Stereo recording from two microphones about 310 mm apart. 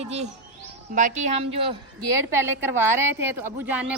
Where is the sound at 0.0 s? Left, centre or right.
Right.